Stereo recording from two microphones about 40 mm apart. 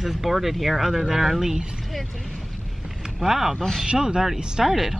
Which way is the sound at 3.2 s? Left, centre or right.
Centre.